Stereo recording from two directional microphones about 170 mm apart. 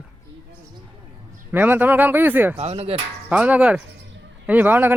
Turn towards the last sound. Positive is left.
turn(degrees=-10)  # may be behind; listen again after turning